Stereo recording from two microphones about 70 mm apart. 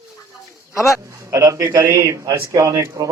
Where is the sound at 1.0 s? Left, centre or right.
Right.